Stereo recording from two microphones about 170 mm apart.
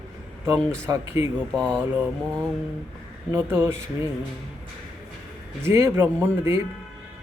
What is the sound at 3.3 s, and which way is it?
Speech, 15° right (ahead or behind).